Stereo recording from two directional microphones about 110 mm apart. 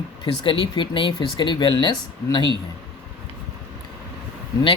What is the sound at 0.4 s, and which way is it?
Speech, 50° left (ahead or behind).